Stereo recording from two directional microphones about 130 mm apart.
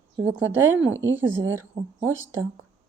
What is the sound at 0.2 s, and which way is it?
Speech, 15° right (ahead or behind).